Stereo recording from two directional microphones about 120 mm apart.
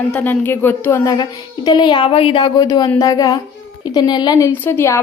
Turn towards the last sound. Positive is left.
turn(degrees=20)  # may be behind; listen again after turning